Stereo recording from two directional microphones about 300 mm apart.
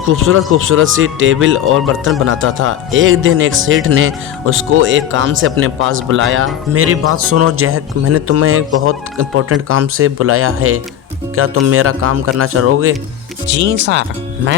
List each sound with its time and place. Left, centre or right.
0.0 s speech: right